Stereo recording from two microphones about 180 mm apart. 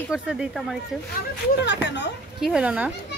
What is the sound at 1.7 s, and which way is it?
Speech, 75° left (ahead or behind).